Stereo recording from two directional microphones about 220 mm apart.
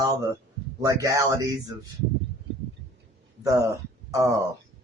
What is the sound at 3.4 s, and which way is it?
Speech, 15° right (ahead or behind).